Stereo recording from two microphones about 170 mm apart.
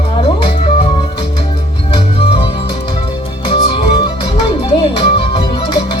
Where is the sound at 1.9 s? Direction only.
30° left (ahead or behind).